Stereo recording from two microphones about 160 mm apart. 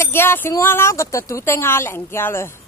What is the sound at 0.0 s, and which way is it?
A woman's voice, 15° left (ahead or behind).